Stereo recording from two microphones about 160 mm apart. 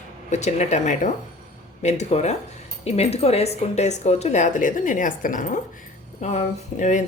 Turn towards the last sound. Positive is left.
turn(degrees=50)  # may be behind; listen again after turning